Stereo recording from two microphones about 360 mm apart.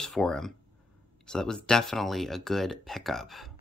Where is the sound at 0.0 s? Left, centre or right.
Centre.